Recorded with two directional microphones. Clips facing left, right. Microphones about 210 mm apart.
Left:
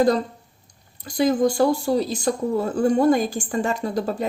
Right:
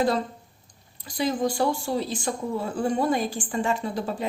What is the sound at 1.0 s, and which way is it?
Speech, 45° left (ahead or behind).